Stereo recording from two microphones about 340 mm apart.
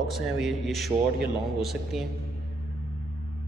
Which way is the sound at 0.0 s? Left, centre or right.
Centre.